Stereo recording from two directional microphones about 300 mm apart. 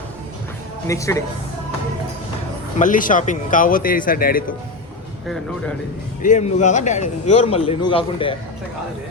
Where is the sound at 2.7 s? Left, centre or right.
Left.